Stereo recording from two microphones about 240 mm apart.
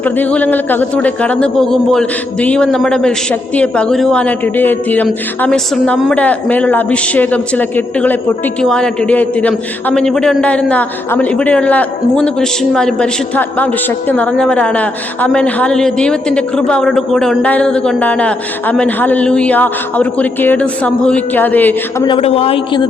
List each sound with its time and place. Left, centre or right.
0.0 s a man's voice: centre
22.1 s a man's voice: left